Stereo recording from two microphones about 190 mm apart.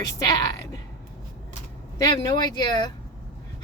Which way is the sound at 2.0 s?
20° left (ahead or behind).